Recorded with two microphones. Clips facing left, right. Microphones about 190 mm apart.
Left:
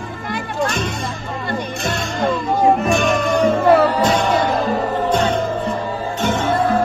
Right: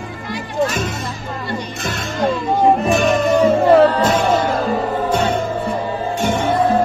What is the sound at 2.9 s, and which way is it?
Music, centre (ahead or behind).